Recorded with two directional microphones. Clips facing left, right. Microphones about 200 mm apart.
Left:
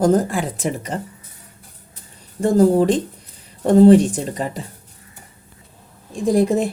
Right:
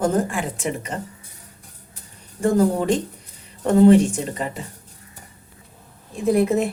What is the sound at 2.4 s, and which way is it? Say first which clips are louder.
Speech: left 4 dB; 35° left (ahead or behind).